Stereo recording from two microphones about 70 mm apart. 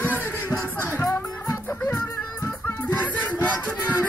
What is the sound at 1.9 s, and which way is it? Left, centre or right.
Music, left.